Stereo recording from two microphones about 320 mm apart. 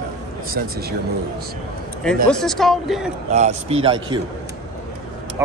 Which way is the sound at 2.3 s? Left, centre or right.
Centre.